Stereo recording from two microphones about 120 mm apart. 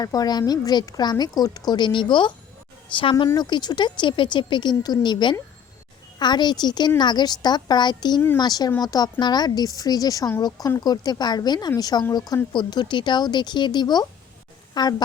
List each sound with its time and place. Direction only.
0.0 s a woman's voice: 30° left (ahead or behind)